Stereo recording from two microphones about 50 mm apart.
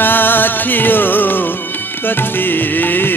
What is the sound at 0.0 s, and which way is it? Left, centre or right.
Music, left.